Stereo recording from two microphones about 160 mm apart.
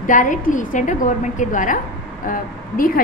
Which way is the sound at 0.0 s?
55° left (ahead or behind).